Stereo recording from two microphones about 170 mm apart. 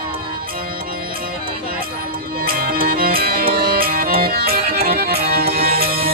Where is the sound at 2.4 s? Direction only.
60° right (ahead or behind).